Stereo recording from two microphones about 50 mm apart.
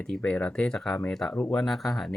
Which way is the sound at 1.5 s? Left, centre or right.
Centre.